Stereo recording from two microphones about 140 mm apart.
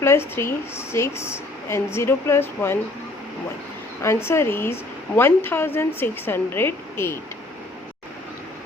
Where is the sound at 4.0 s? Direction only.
20° left (ahead or behind).